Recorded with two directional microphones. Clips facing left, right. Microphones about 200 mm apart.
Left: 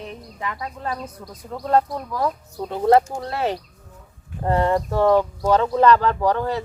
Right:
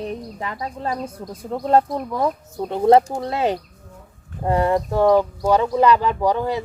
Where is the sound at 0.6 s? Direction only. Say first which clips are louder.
Right 6 dB; 25° right (ahead or behind).